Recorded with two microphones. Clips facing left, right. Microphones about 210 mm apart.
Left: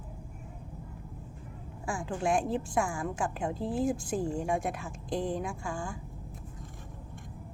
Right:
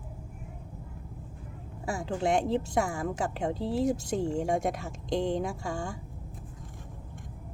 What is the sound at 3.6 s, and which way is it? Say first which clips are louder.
Speech: right 2 dB; 70° right (ahead or behind).